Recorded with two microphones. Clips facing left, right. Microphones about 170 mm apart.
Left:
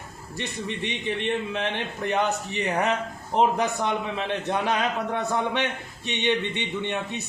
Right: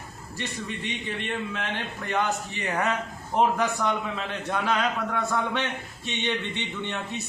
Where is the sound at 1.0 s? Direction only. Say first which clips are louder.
Left 6 dB; 20° left (ahead or behind).